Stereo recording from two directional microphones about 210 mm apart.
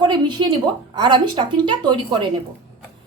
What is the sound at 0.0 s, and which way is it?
A woman's voice, 20° right (ahead or behind).